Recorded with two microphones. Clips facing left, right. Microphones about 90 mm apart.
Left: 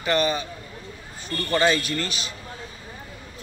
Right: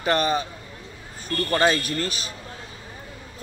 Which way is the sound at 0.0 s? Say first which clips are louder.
Right 1 dB; 40° right (ahead or behind).